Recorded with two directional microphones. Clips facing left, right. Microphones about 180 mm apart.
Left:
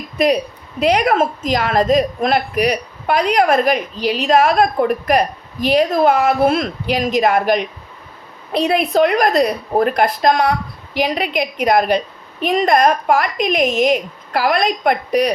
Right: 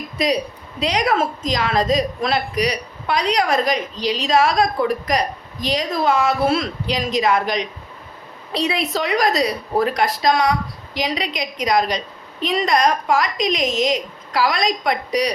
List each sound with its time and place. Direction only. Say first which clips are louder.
0.8 s a woman's voice: left 5 dB; 55° left (ahead or behind)